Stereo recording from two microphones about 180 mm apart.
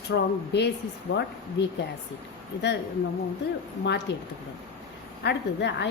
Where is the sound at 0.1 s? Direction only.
70° left (ahead or behind).